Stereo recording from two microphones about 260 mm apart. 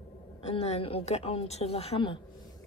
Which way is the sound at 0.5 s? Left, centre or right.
Left.